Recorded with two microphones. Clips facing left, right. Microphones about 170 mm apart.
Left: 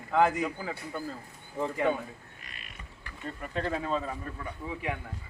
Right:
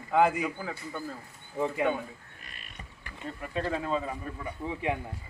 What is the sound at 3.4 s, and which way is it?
Speech, 5° right (ahead or behind).